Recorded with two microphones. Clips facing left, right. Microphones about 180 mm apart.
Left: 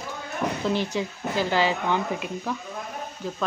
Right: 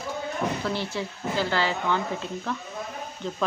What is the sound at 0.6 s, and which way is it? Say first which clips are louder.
Speech: left 4 dB; 15° left (ahead or behind).